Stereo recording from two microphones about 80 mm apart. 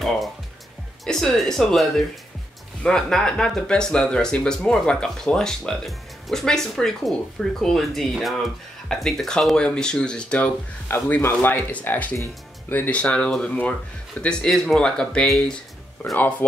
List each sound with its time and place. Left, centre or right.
1.0 s speech: centre
10.9 s speech: left; by 15.5 s centre
16.2 s speech: centre